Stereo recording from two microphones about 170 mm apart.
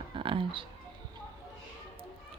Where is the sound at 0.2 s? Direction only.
30° right (ahead or behind).